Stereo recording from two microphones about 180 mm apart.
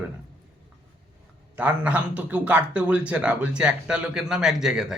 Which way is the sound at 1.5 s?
5° right (ahead or behind).